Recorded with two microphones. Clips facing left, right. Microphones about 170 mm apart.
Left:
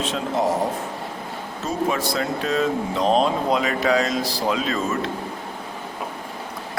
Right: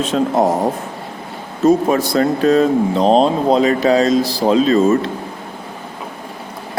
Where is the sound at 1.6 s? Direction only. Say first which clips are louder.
Right 11 dB; 45° right (ahead or behind).